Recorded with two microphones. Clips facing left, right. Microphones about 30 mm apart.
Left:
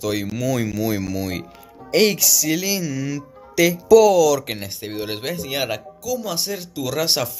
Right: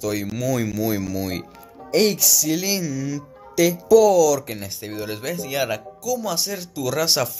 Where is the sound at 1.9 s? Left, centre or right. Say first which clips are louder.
Left 2 dB; left.